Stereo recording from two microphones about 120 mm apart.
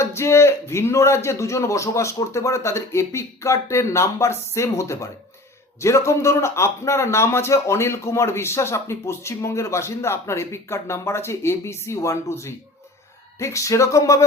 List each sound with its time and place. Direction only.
0.0 s a man's voice: 25° left (ahead or behind)